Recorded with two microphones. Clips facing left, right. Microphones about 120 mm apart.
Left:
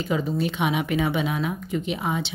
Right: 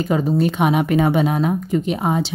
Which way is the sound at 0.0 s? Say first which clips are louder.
Right 7 dB; 45° right (ahead or behind).